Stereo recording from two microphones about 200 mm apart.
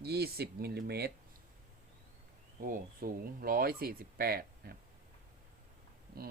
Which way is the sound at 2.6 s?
45° right (ahead or behind).